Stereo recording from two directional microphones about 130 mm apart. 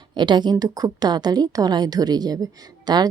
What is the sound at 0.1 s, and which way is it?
A woman's voice, 35° right (ahead or behind).